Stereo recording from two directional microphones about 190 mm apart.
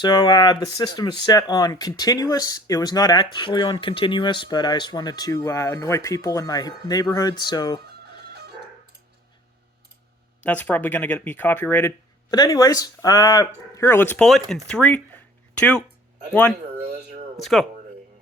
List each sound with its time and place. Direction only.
0.0 s speech: 20° left (ahead or behind)
8.3 s music: 55° right (ahead or behind)
10.4 s speech: 10° left (ahead or behind)
14.7 s a sound: 5° left (ahead or behind)
16.3 s speech: 10° left (ahead or behind)